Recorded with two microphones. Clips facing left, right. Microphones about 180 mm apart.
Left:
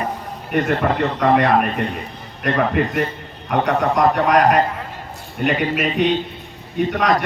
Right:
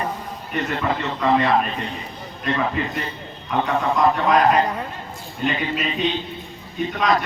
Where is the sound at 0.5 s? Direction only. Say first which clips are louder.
Left 5 dB; 50° left (ahead or behind).